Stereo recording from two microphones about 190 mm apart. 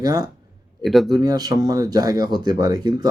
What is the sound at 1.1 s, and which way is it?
Speech, 20° right (ahead or behind).